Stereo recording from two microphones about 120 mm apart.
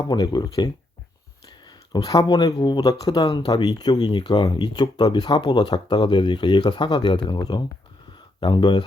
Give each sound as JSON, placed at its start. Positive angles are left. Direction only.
{"t": 0.0, "sound": "speech", "side_deg": 35}
{"t": 1.9, "sound": "speech", "side_deg": 35}